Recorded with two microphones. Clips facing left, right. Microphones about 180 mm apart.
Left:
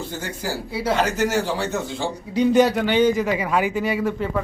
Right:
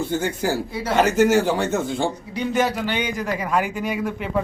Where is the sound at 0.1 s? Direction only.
55° right (ahead or behind).